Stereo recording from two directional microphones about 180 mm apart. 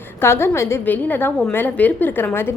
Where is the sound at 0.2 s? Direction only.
15° left (ahead or behind).